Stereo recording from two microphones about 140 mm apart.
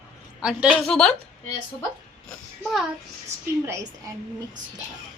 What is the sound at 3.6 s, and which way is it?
Speech, 20° right (ahead or behind).